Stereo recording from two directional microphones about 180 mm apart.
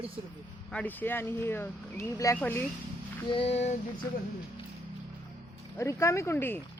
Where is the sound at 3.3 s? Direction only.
35° left (ahead or behind).